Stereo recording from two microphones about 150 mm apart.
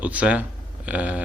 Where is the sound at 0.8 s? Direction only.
10° right (ahead or behind).